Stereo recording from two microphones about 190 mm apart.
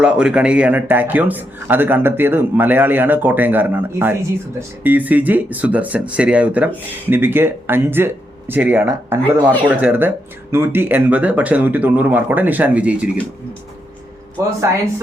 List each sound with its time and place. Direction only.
0.0 s a man's voice: 5° right (ahead or behind)
14.4 s a man's voice: 15° right (ahead or behind)